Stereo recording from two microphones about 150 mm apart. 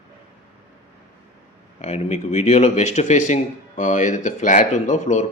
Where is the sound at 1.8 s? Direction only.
50° left (ahead or behind).